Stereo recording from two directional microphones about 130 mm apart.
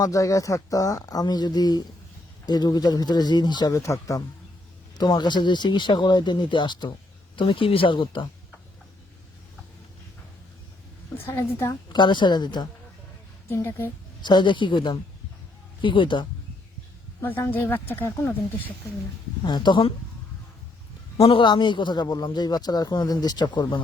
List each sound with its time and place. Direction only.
0.0 s speech: 25° left (ahead or behind)
11.3 s speech: 20° left (ahead or behind)
11.9 s speech: 35° left (ahead or behind)
13.5 s speech: 20° left (ahead or behind)
14.2 s speech: 35° left (ahead or behind)
17.2 s speech: 20° left (ahead or behind)
19.5 s speech: 35° left (ahead or behind)
21.2 s speech: 45° left (ahead or behind)